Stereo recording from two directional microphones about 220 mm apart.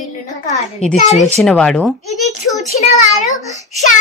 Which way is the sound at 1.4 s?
5° left (ahead or behind).